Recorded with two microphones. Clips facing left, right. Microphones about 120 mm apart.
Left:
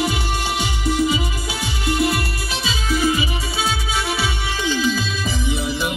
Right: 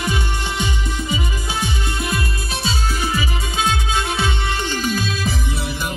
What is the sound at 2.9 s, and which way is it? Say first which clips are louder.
Music: left 4 dB; 40° right (ahead or behind).